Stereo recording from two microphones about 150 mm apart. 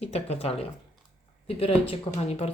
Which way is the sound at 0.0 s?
45° left (ahead or behind).